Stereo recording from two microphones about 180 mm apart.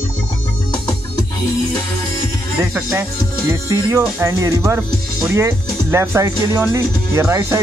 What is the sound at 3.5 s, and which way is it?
Speech, 15° right (ahead or behind).